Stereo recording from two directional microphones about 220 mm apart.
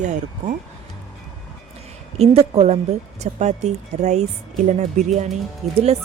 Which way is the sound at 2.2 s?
25° right (ahead or behind).